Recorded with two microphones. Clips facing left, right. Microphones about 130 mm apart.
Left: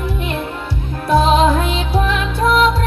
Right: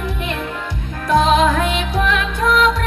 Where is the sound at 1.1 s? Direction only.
30° left (ahead or behind).